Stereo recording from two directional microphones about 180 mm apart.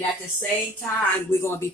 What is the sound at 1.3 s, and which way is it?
Speech, 15° left (ahead or behind).